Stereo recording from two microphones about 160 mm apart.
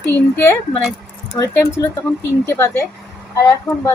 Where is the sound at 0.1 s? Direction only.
15° left (ahead or behind).